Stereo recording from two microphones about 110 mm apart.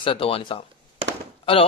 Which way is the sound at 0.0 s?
55° left (ahead or behind).